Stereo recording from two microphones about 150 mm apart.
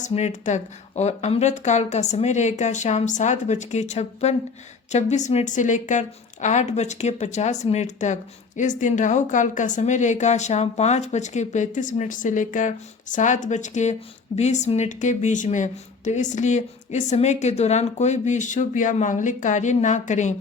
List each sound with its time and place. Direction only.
0.0 s speech: 50° left (ahead or behind)